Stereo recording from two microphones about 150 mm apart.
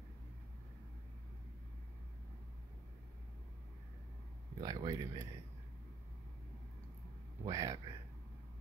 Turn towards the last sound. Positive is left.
turn(degrees=-25)  # may be behind; listen again after turning